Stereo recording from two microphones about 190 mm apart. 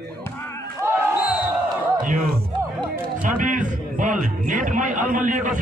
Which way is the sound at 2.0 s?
45° right (ahead or behind).